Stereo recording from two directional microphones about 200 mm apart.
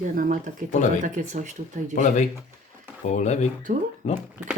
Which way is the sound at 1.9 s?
40° left (ahead or behind).